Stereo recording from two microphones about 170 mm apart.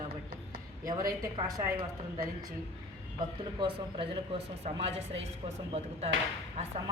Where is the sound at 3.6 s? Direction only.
30° right (ahead or behind).